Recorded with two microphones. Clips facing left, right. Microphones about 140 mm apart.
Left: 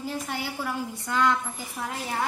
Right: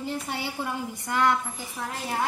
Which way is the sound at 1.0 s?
15° right (ahead or behind).